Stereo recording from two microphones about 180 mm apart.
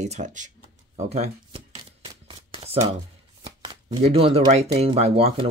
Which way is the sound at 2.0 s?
30° right (ahead or behind).